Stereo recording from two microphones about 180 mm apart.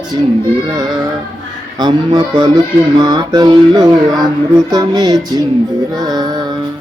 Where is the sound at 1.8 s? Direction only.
25° right (ahead or behind).